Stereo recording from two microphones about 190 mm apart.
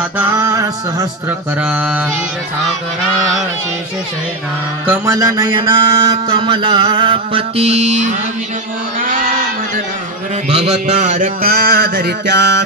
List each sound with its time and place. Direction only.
0.2 s music: 15° right (ahead or behind)
1.6 s mantra: 5° right (ahead or behind)
4.8 s music: 15° right (ahead or behind); by 8.2 s 35° right (ahead or behind)
10.9 s music: 35° right (ahead or behind); by 12.6 s 70° right (ahead or behind)